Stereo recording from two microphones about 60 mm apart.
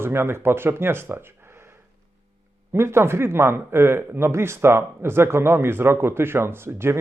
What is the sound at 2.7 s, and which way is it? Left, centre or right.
Speech, right.